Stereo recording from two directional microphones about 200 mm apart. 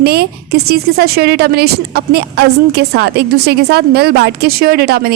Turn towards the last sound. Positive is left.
turn(degrees=-50)  # may be behind; listen again after turning